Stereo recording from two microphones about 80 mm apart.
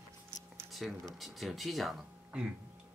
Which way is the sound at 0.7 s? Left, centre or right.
Centre.